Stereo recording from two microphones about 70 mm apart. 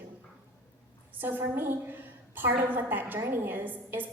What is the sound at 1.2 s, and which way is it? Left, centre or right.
A woman's voice, right.